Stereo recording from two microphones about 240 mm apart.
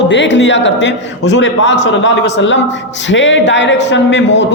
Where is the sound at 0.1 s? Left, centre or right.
Left.